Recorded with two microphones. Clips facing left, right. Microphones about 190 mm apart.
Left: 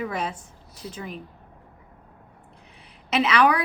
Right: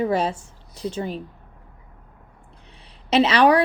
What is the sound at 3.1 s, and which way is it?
Speech, 30° right (ahead or behind).